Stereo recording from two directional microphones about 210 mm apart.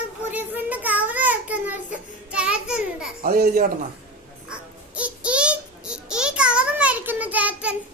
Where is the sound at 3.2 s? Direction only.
45° right (ahead or behind).